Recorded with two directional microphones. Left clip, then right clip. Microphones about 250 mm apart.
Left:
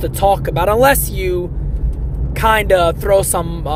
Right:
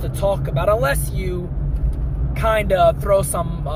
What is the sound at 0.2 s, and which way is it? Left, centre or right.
Speech, left.